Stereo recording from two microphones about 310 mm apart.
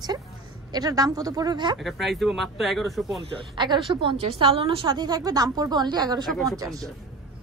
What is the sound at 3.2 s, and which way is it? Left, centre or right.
A woman's voice, centre.